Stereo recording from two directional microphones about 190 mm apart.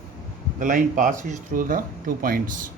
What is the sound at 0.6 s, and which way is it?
Speech, 45° right (ahead or behind).